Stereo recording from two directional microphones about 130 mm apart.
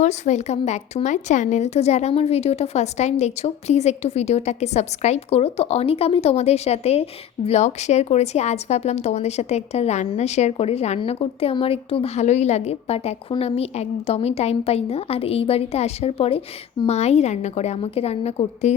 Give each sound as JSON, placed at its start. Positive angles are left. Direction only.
{"t": 0.0, "sound": "a woman's voice", "side_deg": 60}